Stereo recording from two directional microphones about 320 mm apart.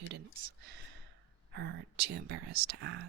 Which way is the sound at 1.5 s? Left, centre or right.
Right.